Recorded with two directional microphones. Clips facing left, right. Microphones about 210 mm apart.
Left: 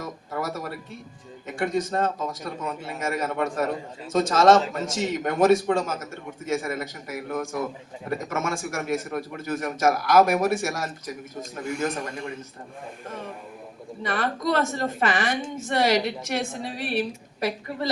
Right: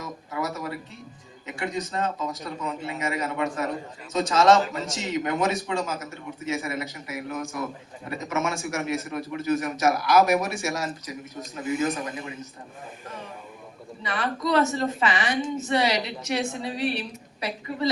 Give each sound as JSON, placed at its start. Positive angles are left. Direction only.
{"t": 0.0, "sound": "a sound", "side_deg": 50}
{"t": 1.5, "sound": "a man's voice", "side_deg": 50}
{"t": 12.0, "sound": "a man's voice", "side_deg": -5}
{"t": 13.1, "sound": "a man's voice", "side_deg": 50}